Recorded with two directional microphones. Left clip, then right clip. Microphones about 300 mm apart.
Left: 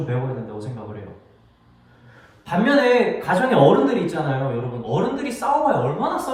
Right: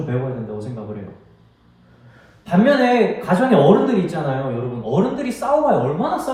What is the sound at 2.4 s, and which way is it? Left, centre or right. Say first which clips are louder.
A man's voice: right 2 dB; centre.